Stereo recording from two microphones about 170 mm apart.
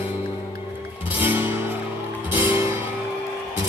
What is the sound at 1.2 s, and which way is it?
Music, 10° right (ahead or behind).